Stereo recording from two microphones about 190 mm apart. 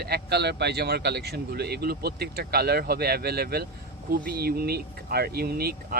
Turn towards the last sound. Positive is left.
turn(degrees=-55)  # may be behind; listen again after turning